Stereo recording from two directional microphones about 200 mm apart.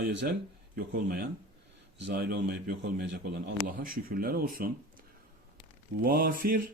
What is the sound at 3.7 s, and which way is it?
A man's voice, 45° right (ahead or behind).